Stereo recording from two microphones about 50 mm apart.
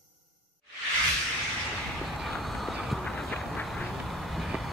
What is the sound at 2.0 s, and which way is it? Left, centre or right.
Vehicle, centre.